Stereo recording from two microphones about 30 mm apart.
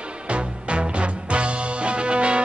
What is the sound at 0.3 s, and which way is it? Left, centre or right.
Music, right.